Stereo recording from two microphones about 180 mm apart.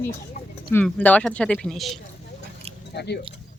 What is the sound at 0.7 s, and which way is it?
Speech, 10° left (ahead or behind).